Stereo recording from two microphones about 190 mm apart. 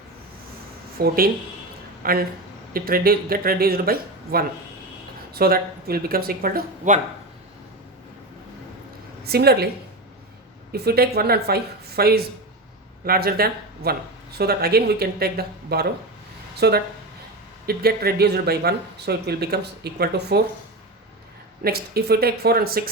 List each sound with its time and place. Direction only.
0.9 s speech: 50° right (ahead or behind)
9.2 s speech: 55° right (ahead or behind)
10.7 s speech: 55° right (ahead or behind)
21.6 s speech: 55° right (ahead or behind)